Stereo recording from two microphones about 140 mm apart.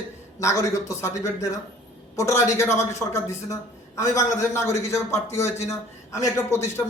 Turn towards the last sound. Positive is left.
turn(degrees=20)  # may be behind; listen again after turning